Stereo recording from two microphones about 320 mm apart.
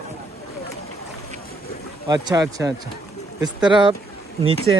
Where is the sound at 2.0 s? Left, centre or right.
Centre.